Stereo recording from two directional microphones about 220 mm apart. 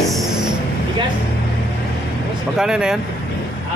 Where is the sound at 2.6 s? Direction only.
5° right (ahead or behind).